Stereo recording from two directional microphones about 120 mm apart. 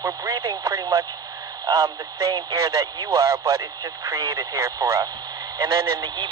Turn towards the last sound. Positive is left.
turn(degrees=-35)  # may be behind; listen again after turning